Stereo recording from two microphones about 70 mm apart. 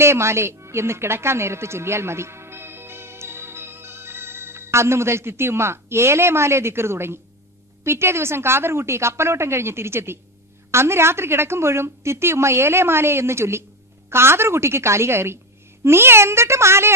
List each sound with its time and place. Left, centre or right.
0.0 s a woman's voice: right